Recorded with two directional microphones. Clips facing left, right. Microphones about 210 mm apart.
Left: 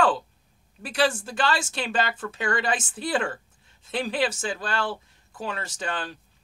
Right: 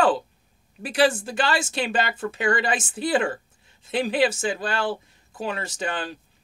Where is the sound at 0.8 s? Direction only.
15° right (ahead or behind).